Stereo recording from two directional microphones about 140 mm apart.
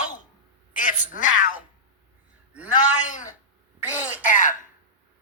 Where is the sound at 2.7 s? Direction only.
65° left (ahead or behind).